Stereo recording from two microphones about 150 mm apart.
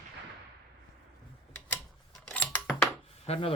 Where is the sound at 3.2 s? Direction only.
45° left (ahead or behind).